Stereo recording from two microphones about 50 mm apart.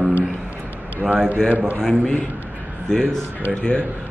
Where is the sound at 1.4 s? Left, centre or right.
Right.